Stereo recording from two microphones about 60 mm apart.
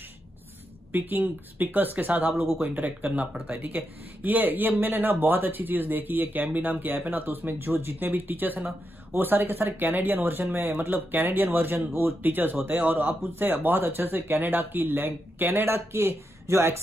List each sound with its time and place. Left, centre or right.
0.9 s speech: right